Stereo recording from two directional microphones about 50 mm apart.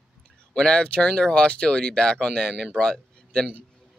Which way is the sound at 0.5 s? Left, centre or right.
Centre.